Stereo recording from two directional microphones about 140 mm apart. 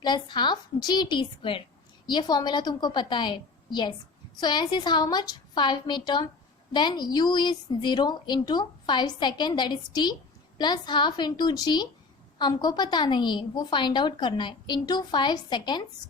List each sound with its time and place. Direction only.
0.0 s a woman's voice: 30° left (ahead or behind)